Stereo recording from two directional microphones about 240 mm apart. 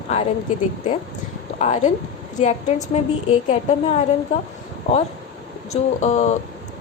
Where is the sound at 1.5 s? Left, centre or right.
Left.